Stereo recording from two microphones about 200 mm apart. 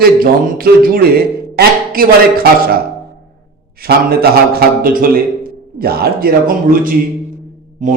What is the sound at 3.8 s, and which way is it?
Speech, 50° right (ahead or behind).